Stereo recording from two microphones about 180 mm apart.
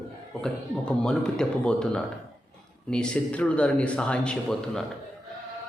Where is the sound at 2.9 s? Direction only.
5° left (ahead or behind).